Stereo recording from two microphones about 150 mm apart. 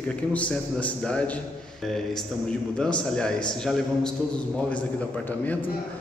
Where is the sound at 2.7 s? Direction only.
5° left (ahead or behind).